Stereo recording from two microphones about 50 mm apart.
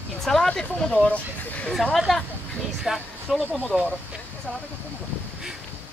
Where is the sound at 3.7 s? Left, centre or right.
Centre.